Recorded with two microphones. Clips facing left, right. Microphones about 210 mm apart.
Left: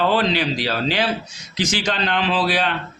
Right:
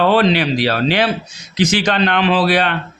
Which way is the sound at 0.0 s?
65° right (ahead or behind).